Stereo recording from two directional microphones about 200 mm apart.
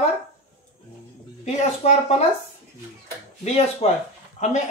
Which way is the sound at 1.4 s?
35° left (ahead or behind).